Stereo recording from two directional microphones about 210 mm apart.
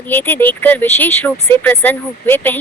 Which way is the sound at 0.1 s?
10° left (ahead or behind).